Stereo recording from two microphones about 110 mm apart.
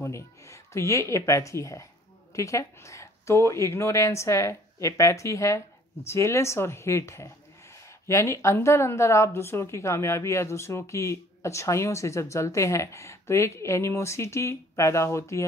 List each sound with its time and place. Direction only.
0.0 s speech: 25° left (ahead or behind)